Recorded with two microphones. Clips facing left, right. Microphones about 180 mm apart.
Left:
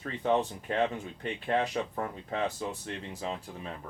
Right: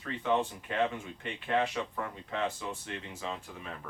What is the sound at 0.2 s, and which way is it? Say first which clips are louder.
Speech: left 3 dB; 40° left (ahead or behind).